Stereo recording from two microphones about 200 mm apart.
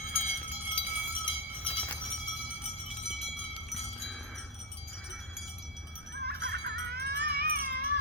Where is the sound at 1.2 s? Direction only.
25° left (ahead or behind).